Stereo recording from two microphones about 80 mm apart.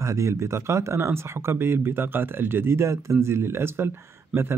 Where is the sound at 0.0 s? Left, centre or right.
Right.